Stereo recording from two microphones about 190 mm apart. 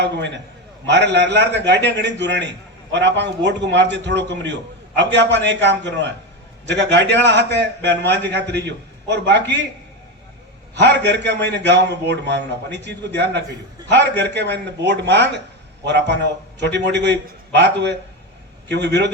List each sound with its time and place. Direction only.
0.0 s a man's voice: 65° right (ahead or behind)
10.8 s a man's voice: 65° right (ahead or behind)